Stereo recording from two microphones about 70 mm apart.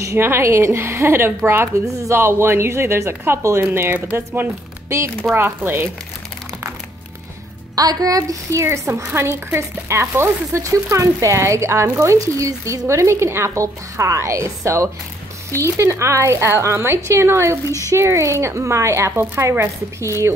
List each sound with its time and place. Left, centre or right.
0.0 s speech: right
7.7 s speech: right